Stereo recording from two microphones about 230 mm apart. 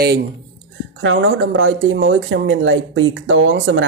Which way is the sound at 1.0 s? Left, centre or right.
Right.